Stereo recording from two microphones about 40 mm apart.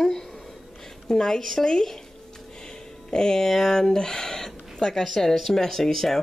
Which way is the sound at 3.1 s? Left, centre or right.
Centre.